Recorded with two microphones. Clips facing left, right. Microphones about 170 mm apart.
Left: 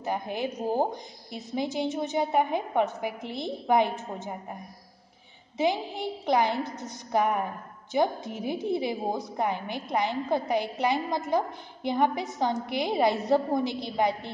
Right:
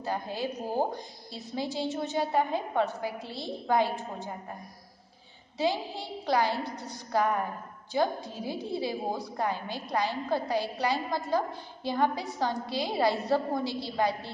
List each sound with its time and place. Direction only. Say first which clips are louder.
0.0 s a woman's voice: left 2 dB; 20° left (ahead or behind)
5.6 s a woman's voice: left 3 dB; 20° left (ahead or behind)